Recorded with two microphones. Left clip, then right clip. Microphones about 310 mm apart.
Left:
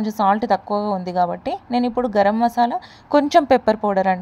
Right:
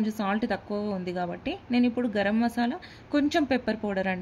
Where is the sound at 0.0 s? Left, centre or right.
Centre.